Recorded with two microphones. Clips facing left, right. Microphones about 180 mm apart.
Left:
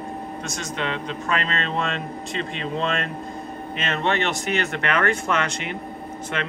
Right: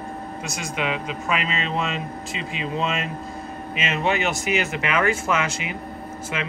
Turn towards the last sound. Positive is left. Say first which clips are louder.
# left 1 dB
turn(degrees=-5)  # may be behind; listen again after turning